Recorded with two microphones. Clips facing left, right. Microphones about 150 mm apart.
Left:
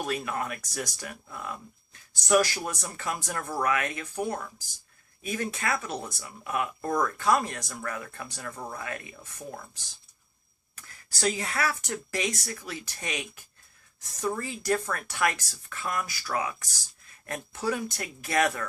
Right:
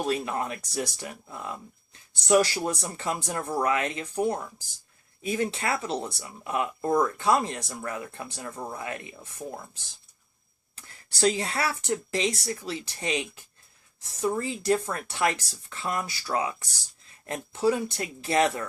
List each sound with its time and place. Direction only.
0.0 s speech: 25° right (ahead or behind)
10.8 s speech: 30° right (ahead or behind)